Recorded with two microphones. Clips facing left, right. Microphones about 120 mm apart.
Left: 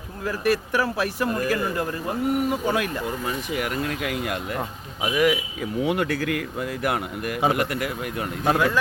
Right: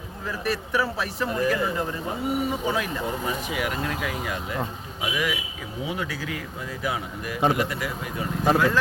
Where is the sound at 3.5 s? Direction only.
55° left (ahead or behind).